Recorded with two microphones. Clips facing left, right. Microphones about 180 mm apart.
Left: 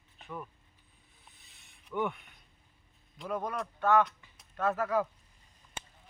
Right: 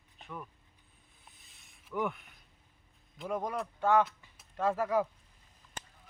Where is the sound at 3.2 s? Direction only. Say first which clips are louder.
Even; 20° right (ahead or behind).